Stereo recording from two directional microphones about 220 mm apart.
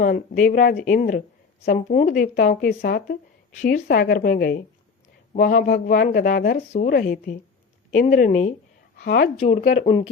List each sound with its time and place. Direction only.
0.0 s speech: 35° left (ahead or behind)
9.4 s speech: 25° left (ahead or behind)